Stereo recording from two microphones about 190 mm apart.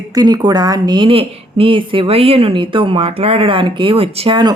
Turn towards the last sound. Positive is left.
turn(degrees=-25)  # may be behind; listen again after turning